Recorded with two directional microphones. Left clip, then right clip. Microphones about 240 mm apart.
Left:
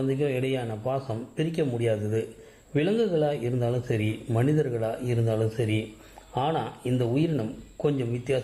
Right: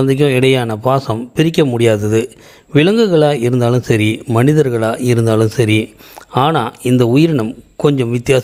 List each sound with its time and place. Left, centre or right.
0.0 s speech: right